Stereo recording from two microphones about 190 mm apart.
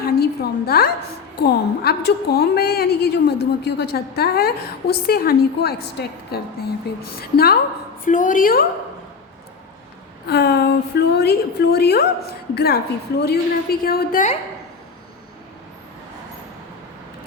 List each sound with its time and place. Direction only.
0.0 s a sound: 55° left (ahead or behind)
1.4 s a woman's voice: 55° left (ahead or behind)
8.0 s a woman's voice: 40° left (ahead or behind)
10.2 s a woman's voice: 55° left (ahead or behind)